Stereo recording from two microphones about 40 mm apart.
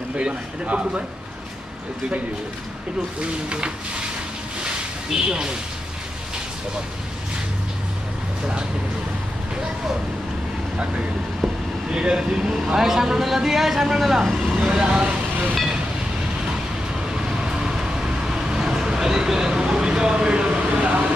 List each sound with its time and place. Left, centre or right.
0.2 s a man's voice: right
3.4 s a man's voice: right
5.3 s a man's voice: right
11.9 s a man's voice: right
14.6 s a man's voice: centre
15.5 s speech: centre
17.1 s vehicle: centre